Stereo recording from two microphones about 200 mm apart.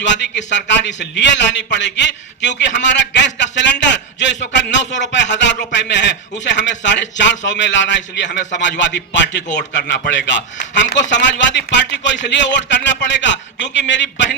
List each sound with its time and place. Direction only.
0.0 s a man's voice: 60° left (ahead or behind)